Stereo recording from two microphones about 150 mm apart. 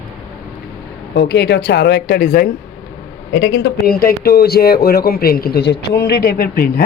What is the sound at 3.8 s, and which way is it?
Speech, 90° left.